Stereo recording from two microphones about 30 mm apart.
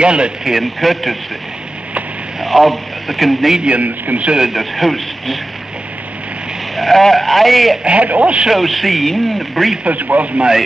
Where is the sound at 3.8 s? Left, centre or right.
Right.